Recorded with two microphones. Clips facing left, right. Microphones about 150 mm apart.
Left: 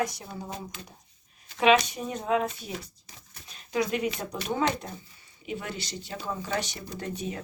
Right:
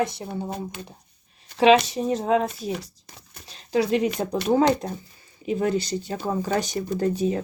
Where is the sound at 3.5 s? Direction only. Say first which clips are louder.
Right 6 dB; 30° right (ahead or behind).